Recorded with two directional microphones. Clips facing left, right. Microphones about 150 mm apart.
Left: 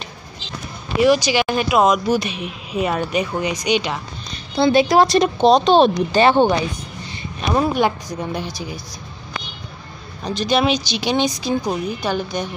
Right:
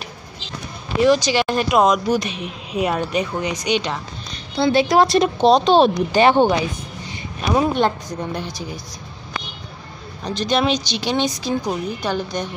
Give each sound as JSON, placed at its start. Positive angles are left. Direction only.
{"t": 0.9, "sound": "speech", "side_deg": 10}
{"t": 4.6, "sound": "speech", "side_deg": 20}
{"t": 4.8, "sound": "speech", "side_deg": 0}
{"t": 6.1, "sound": "speech", "side_deg": -15}
{"t": 7.7, "sound": "speech", "side_deg": 10}
{"t": 10.2, "sound": "speech", "side_deg": 10}